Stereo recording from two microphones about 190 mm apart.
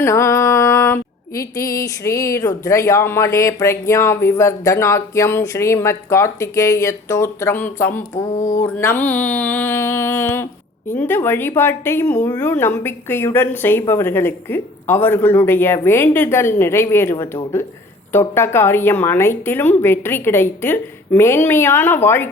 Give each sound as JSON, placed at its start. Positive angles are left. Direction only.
{"t": 0.0, "sound": "music", "side_deg": 15}
{"t": 8.4, "sound": "speech", "side_deg": 40}
{"t": 8.6, "sound": "music", "side_deg": 10}